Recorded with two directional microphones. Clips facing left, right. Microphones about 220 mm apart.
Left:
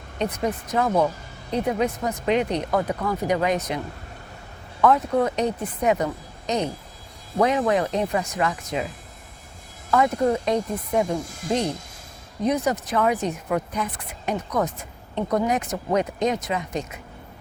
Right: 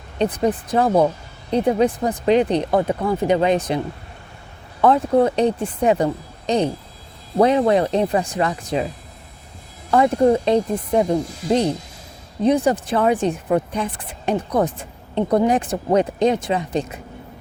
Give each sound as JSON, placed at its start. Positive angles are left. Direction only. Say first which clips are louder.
{"t": 0.2, "sound": "speech", "louder": "right 6 dB", "side_deg": -30}
{"t": 4.8, "sound": "speech", "louder": "right 4 dB", "side_deg": -30}
{"t": 9.9, "sound": "speech", "louder": "right 5 dB", "side_deg": -30}